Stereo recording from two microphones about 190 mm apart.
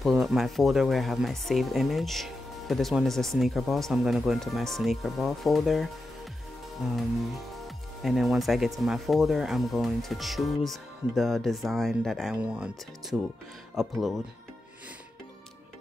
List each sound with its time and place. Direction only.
0.0 s speech: centre (ahead or behind)